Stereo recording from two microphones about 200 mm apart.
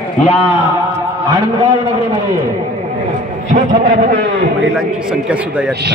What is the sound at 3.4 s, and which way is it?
A man's voice, 40° right (ahead or behind).